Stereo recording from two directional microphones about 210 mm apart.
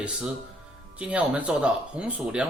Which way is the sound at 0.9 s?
5° right (ahead or behind).